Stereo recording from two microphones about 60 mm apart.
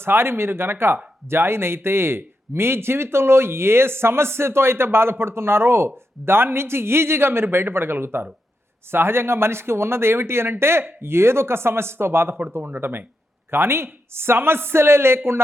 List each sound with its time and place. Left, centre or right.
0.0 s speech: right